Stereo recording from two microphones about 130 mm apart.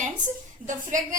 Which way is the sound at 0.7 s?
80° right.